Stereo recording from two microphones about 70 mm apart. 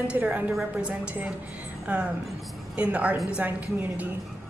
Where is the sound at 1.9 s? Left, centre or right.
Centre.